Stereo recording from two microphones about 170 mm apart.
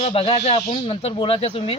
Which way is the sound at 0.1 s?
35° left (ahead or behind).